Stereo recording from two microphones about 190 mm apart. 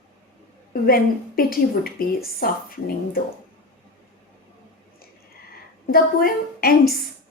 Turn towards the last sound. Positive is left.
turn(degrees=50)  # may be behind; listen again after turning